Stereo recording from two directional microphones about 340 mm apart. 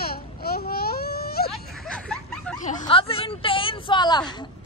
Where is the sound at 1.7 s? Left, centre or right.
Centre.